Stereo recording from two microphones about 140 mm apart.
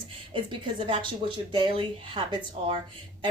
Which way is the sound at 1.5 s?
35° right (ahead or behind).